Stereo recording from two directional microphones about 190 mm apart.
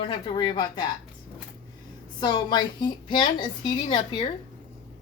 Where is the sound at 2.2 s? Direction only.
20° left (ahead or behind).